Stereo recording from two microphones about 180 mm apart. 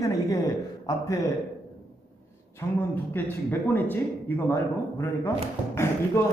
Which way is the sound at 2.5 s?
10° left (ahead or behind).